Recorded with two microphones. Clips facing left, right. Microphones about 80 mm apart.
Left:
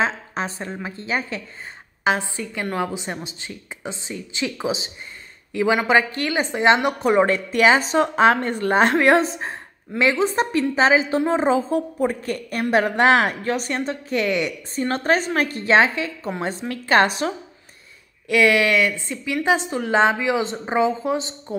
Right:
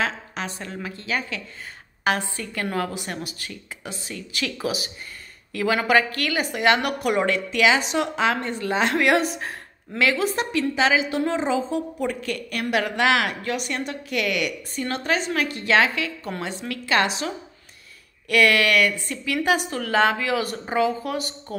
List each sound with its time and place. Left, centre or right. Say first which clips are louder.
0.0 s a woman's voice: left 4 dB; left
2.0 s a woman's voice: left 2 dB; centre; by 8.9 s left
8.9 s a woman's voice: left 4 dB; left
18.3 s a woman's voice: left 2 dB; centre